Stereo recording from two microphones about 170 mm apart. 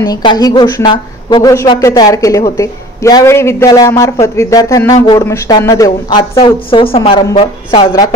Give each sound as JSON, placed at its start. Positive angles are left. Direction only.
{"t": 0.0, "sound": "a woman's voice", "side_deg": 25}